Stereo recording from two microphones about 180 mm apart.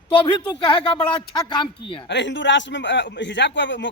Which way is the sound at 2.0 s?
80° left.